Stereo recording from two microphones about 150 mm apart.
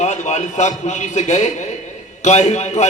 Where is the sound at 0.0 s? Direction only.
50° left (ahead or behind).